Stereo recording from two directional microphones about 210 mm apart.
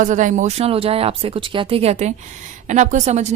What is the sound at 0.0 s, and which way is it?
A woman's voice, 35° right (ahead or behind).